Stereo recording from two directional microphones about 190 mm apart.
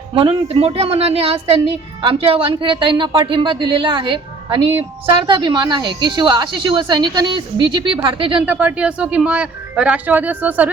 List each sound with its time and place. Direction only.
0.1 s speech: 25° right (ahead or behind)
8.4 s speech: 5° right (ahead or behind)